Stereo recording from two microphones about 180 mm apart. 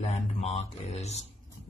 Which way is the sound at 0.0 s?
35° left (ahead or behind).